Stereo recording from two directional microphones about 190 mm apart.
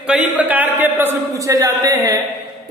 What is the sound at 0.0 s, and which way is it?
A man's voice, 5° right (ahead or behind).